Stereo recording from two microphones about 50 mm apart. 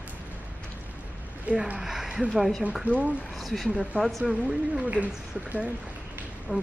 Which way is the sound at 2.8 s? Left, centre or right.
Right.